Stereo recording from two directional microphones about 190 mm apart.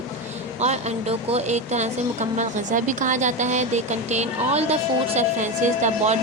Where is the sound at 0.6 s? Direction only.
35° right (ahead or behind).